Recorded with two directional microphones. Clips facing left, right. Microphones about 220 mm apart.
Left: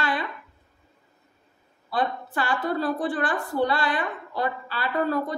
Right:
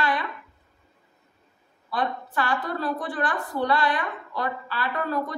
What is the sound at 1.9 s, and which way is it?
A woman's voice, 30° left (ahead or behind).